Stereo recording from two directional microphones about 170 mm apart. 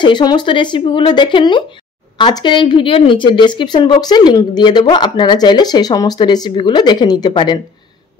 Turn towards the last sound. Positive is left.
turn(degrees=25)  # may be behind; listen again after turning